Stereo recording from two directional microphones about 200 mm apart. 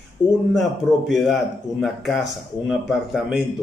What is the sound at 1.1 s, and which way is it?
Speech, centre (ahead or behind).